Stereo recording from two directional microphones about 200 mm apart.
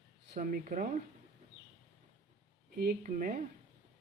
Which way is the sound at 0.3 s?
40° right (ahead or behind).